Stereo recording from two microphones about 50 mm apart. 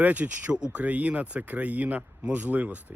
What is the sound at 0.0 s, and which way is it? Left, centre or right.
Speech, right.